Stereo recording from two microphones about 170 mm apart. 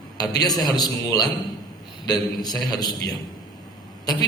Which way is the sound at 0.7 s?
25° left (ahead or behind).